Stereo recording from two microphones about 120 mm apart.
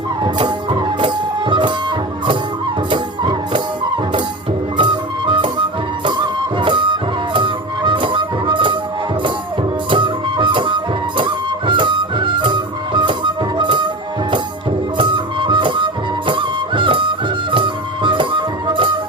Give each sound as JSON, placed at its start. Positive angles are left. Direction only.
{"t": 0.2, "sound": "music", "side_deg": -40}
{"t": 2.9, "sound": "music", "side_deg": -40}
{"t": 9.9, "sound": "music", "side_deg": -40}
{"t": 14.9, "sound": "music", "side_deg": -40}